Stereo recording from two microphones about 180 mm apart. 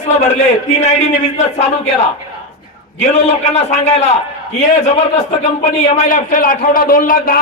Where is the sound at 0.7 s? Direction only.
40° left (ahead or behind).